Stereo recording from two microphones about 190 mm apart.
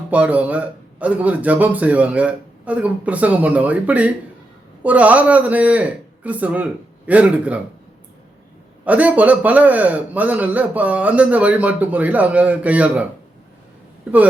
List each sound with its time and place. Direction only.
0.1 s a man's voice: 5° right (ahead or behind)
8.8 s a man's voice: 10° right (ahead or behind)